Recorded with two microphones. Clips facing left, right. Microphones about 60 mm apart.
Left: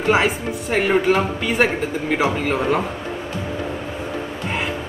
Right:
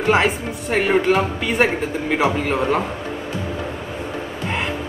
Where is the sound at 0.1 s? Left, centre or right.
Centre.